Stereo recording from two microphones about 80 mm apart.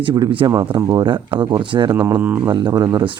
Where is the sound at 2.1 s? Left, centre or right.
Right.